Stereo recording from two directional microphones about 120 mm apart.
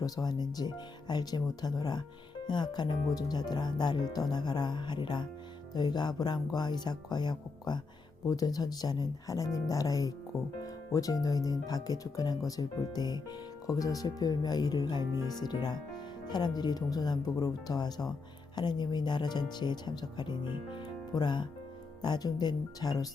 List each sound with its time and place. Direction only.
0.0 s speech: 35° left (ahead or behind)